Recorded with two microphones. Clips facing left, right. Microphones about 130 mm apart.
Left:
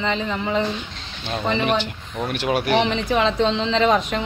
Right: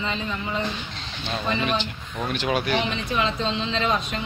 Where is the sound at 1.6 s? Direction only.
70° left (ahead or behind).